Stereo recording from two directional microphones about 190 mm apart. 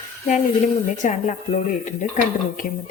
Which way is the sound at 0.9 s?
40° left (ahead or behind).